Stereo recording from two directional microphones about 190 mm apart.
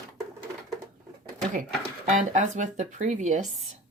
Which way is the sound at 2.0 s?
40° right (ahead or behind).